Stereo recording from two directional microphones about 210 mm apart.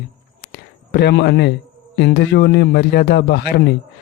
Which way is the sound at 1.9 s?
55° left (ahead or behind).